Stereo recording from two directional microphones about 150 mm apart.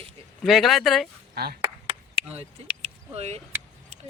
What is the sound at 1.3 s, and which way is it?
Speech, 90° right.